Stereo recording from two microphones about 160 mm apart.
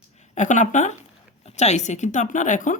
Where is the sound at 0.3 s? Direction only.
50° left (ahead or behind).